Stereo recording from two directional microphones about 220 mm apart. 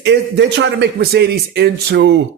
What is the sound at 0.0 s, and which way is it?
A man's voice, 55° right (ahead or behind).